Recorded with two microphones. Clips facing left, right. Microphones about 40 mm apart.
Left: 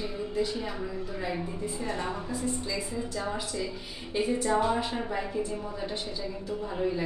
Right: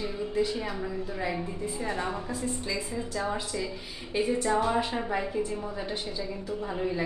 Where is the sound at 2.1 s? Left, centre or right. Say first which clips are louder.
Even; centre.